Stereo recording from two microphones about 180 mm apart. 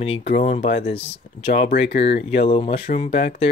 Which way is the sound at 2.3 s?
30° left (ahead or behind).